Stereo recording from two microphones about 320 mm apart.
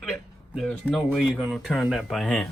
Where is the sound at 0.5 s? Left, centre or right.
Centre.